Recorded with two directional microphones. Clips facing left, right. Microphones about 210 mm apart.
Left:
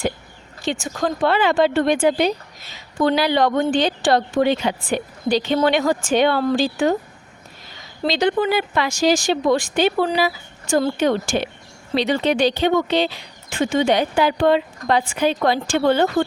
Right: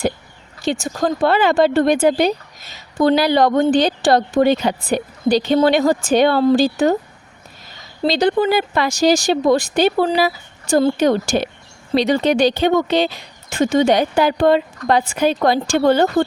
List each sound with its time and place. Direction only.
0.6 s speech: 40° right (ahead or behind)
8.0 s speech: 35° right (ahead or behind)